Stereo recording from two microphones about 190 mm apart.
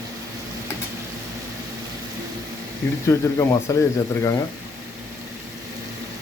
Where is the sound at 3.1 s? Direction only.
15° left (ahead or behind).